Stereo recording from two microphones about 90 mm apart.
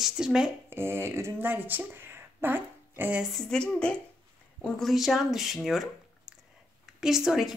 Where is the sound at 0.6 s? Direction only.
25° right (ahead or behind).